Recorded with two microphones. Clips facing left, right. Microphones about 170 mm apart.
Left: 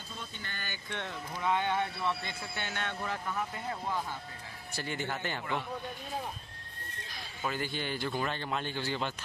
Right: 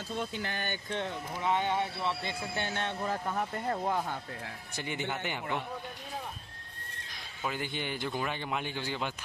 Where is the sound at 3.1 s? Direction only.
40° right (ahead or behind); by 4.5 s 60° right (ahead or behind).